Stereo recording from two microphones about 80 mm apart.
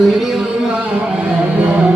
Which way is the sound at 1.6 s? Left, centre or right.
Centre.